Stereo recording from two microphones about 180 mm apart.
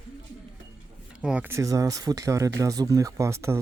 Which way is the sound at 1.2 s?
5° right (ahead or behind).